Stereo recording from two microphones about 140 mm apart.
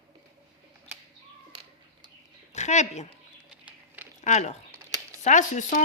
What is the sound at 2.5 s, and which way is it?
Speech, 55° left (ahead or behind).